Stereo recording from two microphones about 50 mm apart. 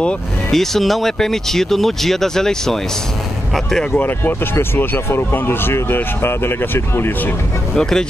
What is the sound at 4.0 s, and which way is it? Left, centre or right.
Speech, left.